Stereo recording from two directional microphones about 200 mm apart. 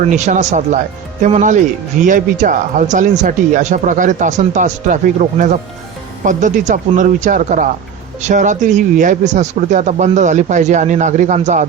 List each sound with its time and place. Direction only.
0.0 s speech: 35° right (ahead or behind)